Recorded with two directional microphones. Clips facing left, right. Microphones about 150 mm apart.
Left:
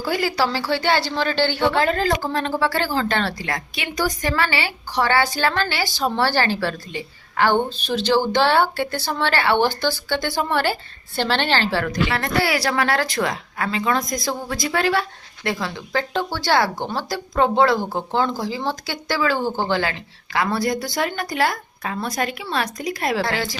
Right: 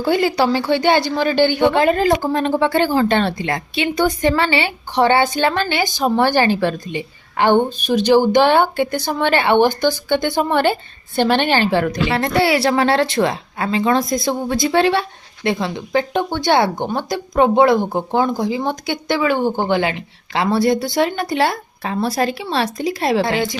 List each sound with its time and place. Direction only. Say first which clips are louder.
0.0 s a woman's voice: right 5 dB; 25° right (ahead or behind)